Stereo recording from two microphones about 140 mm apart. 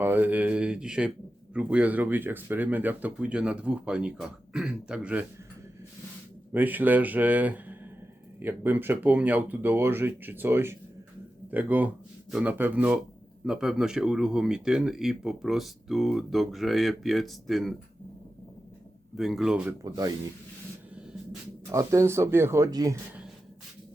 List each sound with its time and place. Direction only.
0.0 s speech: 15° right (ahead or behind)
6.5 s speech: 15° right (ahead or behind)
19.1 s speech: centre (ahead or behind)
19.8 s speech: 25° right (ahead or behind)
21.7 s speech: 20° right (ahead or behind)